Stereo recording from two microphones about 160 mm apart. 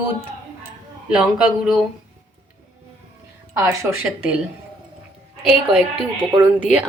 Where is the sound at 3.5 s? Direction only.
15° right (ahead or behind).